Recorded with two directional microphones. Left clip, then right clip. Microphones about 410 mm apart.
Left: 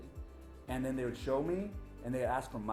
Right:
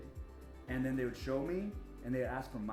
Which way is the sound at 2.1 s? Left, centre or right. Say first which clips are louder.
Left 3 dB; left.